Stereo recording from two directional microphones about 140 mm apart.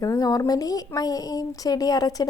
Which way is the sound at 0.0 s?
25° left (ahead or behind).